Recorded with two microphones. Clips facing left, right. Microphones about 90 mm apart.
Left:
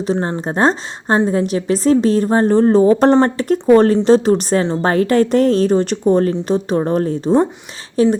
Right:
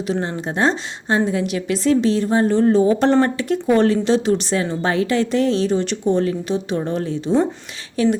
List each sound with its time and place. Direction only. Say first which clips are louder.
0.1 s a woman's voice: left 4 dB; 40° left (ahead or behind)